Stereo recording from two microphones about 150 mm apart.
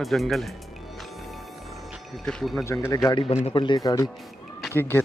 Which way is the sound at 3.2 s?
40° left (ahead or behind).